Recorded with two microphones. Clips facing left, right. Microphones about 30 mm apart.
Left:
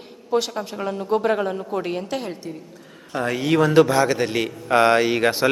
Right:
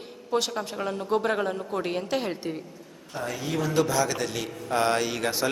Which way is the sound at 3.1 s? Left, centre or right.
Left.